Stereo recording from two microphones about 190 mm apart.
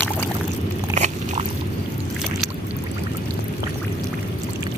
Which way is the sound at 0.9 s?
35° right (ahead or behind).